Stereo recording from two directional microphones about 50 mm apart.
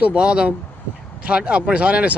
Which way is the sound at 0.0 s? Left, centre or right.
Right.